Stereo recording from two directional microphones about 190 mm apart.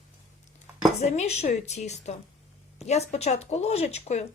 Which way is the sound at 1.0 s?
35° left (ahead or behind).